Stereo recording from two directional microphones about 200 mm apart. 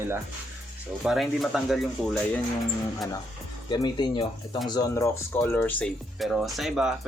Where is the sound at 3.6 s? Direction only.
20° left (ahead or behind).